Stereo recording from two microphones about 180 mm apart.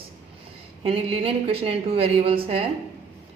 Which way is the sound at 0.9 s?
30° right (ahead or behind).